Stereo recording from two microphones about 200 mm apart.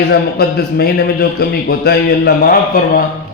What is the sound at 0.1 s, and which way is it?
A man's voice, 50° left (ahead or behind).